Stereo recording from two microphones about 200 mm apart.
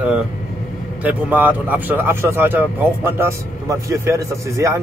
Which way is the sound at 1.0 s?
10° right (ahead or behind).